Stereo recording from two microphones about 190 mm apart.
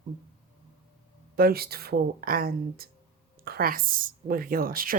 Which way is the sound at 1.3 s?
50° right (ahead or behind).